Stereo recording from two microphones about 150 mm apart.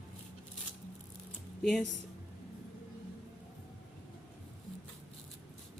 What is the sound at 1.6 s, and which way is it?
Speech, 5° left (ahead or behind).